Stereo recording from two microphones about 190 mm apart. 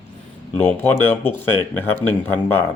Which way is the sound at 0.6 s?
10° left (ahead or behind).